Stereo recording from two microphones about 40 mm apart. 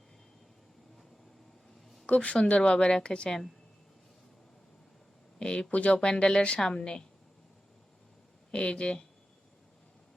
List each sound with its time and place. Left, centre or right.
2.0 s a woman's voice: left
5.4 s speech: left
8.5 s speech: left